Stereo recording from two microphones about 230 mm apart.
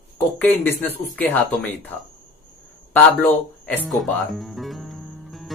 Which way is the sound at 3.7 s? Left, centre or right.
Centre.